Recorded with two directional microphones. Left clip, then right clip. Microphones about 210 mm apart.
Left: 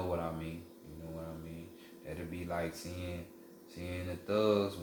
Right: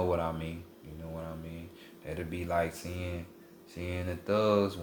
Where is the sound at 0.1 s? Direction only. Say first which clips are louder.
Right 6 dB; 45° right (ahead or behind).